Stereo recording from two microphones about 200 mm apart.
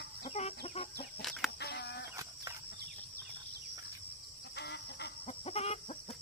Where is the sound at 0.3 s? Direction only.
35° left (ahead or behind).